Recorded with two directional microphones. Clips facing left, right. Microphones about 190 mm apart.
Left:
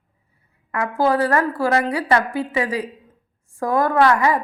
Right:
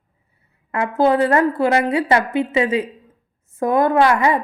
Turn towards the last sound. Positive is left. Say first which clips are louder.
# right 1 dB
turn(degrees=-20)  # may be behind; listen again after turning